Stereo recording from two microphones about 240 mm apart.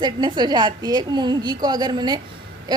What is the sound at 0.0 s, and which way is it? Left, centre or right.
A woman's voice, centre.